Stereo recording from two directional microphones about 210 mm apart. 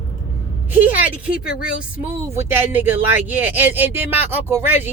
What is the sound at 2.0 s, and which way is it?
Speech, 10° right (ahead or behind).